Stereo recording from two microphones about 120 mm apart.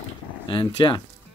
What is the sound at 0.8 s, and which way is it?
Speech, 45° left (ahead or behind).